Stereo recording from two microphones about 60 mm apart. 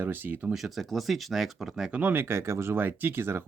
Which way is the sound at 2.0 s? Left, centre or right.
Right.